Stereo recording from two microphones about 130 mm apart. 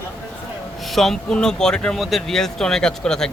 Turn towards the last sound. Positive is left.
turn(degrees=5)  # may be behind; listen again after turning